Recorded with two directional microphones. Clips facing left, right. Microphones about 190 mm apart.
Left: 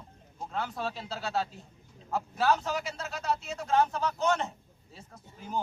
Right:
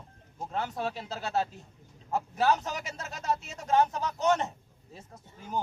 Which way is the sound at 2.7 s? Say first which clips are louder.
Left 3 dB; 45° right (ahead or behind).